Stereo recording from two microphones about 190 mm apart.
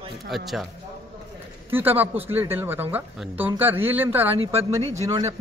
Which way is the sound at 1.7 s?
10° right (ahead or behind).